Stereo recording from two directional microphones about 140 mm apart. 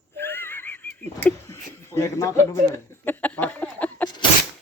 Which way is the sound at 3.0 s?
10° left (ahead or behind).